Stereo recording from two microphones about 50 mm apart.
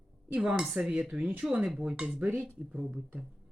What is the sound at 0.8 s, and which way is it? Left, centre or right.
Speech, centre.